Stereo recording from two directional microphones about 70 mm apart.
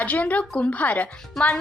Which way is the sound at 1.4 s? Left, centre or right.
Centre.